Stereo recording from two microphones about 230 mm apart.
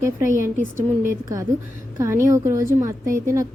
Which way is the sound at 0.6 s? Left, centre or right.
Right.